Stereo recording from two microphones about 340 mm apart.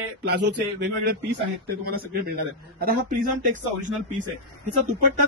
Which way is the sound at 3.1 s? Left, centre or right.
Right.